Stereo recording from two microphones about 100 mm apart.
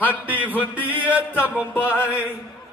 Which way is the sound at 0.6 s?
15° right (ahead or behind).